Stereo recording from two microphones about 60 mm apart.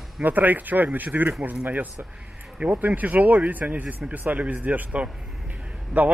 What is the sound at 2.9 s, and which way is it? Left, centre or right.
Speech, right.